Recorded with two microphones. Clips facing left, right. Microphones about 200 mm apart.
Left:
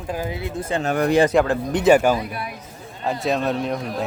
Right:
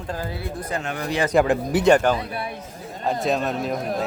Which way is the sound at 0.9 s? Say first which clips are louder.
Left 12 dB; 55° left (ahead or behind).